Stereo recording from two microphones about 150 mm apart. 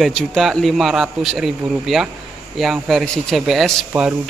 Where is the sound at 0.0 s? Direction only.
Centre (ahead or behind).